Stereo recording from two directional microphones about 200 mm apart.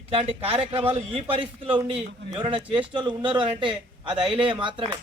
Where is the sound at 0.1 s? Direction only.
30° right (ahead or behind).